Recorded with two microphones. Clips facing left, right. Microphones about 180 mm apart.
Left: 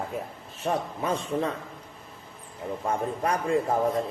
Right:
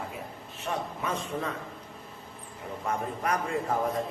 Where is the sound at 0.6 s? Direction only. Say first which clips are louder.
Left 5 dB; 35° left (ahead or behind).